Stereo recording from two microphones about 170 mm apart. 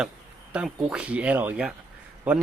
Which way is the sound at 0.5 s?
5° right (ahead or behind).